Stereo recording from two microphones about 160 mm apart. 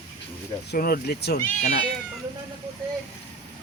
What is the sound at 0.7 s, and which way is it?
Speech, 80° left.